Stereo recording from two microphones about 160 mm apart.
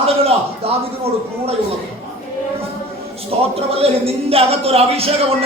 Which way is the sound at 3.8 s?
40° right (ahead or behind).